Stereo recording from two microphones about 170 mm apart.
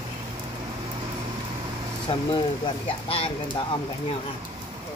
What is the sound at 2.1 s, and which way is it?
Speech, 35° left (ahead or behind).